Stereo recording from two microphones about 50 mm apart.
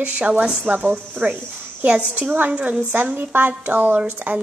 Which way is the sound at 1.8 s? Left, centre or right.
Centre.